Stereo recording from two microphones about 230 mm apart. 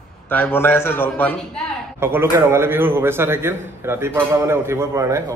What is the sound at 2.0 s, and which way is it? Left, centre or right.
A man's voice, centre.